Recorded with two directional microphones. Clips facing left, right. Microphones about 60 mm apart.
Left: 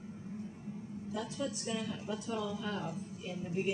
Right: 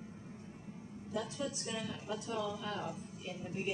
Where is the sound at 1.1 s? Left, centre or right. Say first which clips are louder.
Left 1 dB; centre.